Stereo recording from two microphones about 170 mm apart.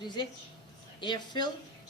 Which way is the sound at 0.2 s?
25° left (ahead or behind).